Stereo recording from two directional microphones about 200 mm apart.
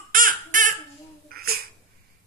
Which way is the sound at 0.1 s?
40° right (ahead or behind).